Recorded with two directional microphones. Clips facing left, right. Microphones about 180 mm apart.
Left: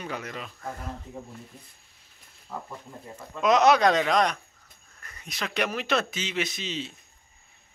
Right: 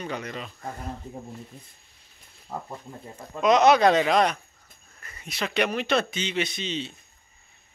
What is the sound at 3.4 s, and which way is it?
Speech, centre (ahead or behind).